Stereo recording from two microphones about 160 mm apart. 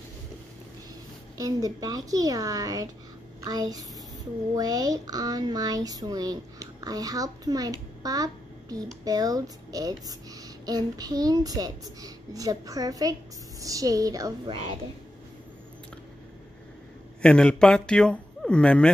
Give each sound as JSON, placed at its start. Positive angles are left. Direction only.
{"t": 1.4, "sound": "speech", "side_deg": -20}
{"t": 14.5, "sound": "speech", "side_deg": -45}
{"t": 17.2, "sound": "speech", "side_deg": 5}